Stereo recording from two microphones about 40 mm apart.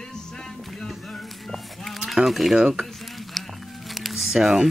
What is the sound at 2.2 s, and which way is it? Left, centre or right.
Speech, centre.